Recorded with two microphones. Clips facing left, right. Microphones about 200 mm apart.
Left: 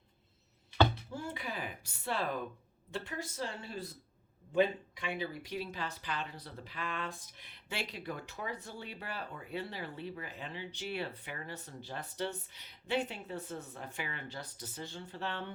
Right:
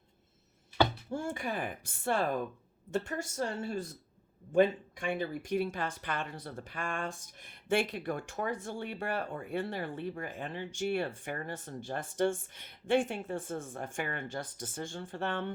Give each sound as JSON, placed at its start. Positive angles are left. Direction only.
{"t": 1.1, "sound": "speech", "side_deg": -45}